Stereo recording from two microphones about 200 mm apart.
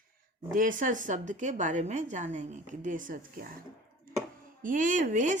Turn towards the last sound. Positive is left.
turn(degrees=-40)  # may be behind; listen again after turning